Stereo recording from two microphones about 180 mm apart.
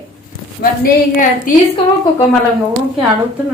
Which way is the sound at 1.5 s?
50° left (ahead or behind).